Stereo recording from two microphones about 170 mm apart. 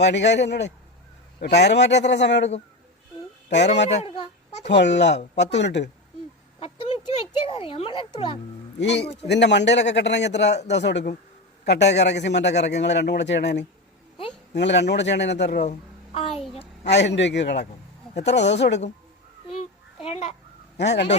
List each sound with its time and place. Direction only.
0.0 s a man's voice: 90° left
3.8 s a sound: 35° left (ahead or behind)
4.7 s a man's voice: 90° left
7.4 s a child's voice: 30° left (ahead or behind)
8.8 s a man's voice: 90° left
16.8 s a man's voice: 90° left
19.5 s child singing: 35° left (ahead or behind)
20.7 s speech: 90° left